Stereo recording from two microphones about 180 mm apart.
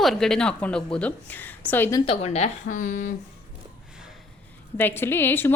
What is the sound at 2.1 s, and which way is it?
Speech, 35° left (ahead or behind).